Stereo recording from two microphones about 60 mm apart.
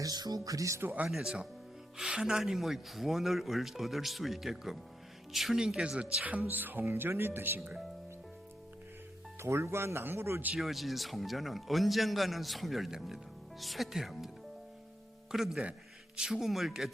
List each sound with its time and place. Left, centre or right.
0.0 s speech: right
1.0 s speech: centre
6.5 s speech: right
6.8 s speech: right
9.4 s speech: right
10.6 s speech: centre
15.3 s speech: centre